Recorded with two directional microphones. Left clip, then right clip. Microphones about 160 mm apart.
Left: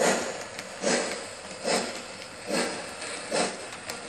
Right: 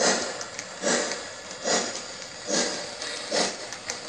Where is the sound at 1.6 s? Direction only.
5° left (ahead or behind).